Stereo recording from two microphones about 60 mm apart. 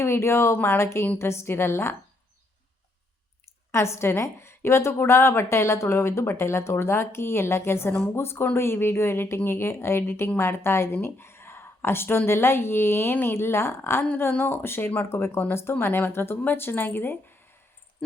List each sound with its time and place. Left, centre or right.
0.0 s a woman's voice: left
3.7 s a woman's voice: left